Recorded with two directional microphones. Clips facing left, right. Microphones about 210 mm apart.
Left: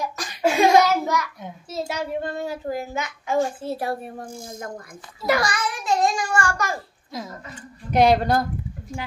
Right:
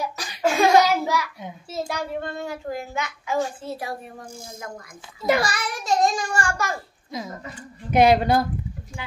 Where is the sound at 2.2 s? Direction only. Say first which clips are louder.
Left 2 dB; 40° left (ahead or behind).